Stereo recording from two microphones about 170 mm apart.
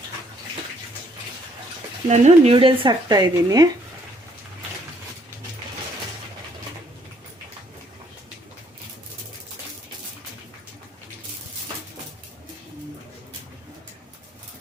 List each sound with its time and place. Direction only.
2.0 s speech: 40° right (ahead or behind); by 3.7 s 20° right (ahead or behind)